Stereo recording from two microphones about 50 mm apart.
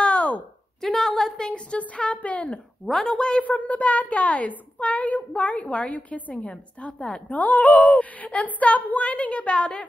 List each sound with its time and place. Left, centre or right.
0.0 s a sound: left
0.8 s a woman's voice: centre
1.4 s a woman's voice: left
2.9 s a woman's voice: centre
3.4 s a woman's voice: left